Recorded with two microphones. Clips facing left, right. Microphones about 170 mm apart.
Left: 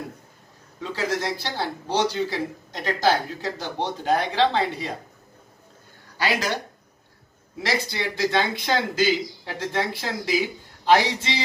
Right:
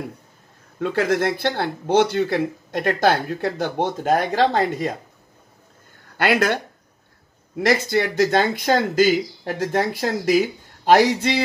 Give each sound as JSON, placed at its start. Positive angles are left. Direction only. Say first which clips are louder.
{"t": 0.7, "sound": "speech", "louder": "right 7 dB", "side_deg": -55}
{"t": 6.1, "sound": "speech", "louder": "right 6 dB", "side_deg": -55}